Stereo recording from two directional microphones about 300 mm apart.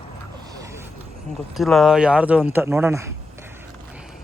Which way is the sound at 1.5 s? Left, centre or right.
Centre.